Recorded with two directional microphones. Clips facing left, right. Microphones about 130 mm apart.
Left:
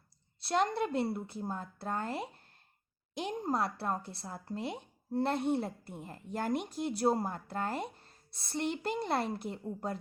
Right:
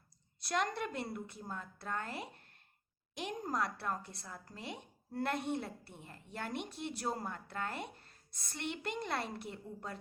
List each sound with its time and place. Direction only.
0.3 s a woman's voice: 30° left (ahead or behind)